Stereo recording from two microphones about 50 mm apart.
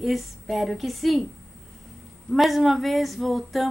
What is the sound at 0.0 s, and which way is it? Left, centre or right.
Speech, centre.